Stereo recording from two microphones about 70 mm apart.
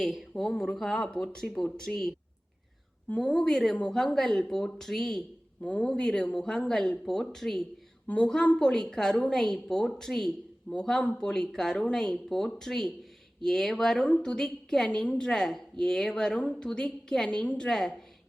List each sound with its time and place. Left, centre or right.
0.0 s speech: centre
5.6 s a woman's voice: left
5.9 s speech: centre
8.0 s speech: centre
14.8 s a woman's voice: centre
16.4 s a woman's voice: left
17.2 s a woman's voice: left
17.7 s speech: centre